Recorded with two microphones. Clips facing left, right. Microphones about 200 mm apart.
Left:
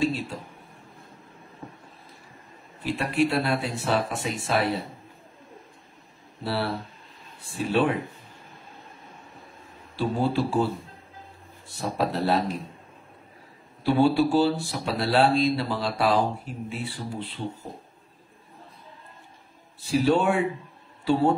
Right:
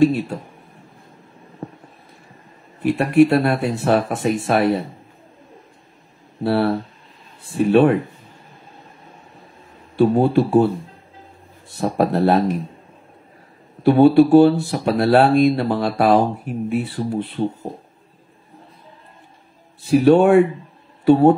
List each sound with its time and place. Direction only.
1.6 s a sound: 60° right (ahead or behind)
2.8 s speech: 55° right (ahead or behind)
6.4 s speech: 55° right (ahead or behind)
9.9 s speech: 55° right (ahead or behind)
11.7 s speech: 55° right (ahead or behind)
13.8 s speech: 60° right (ahead or behind)
19.8 s speech: 60° right (ahead or behind)